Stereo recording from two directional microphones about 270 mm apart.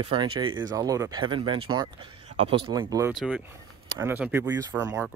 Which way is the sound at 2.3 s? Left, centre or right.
Right.